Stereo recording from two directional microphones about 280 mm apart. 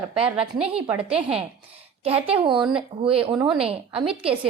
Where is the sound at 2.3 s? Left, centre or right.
Centre.